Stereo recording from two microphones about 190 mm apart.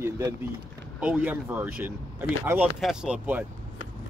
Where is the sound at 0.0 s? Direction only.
15° right (ahead or behind).